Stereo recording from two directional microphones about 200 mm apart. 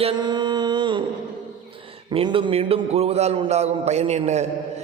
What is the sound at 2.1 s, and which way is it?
A man's voice, 25° right (ahead or behind).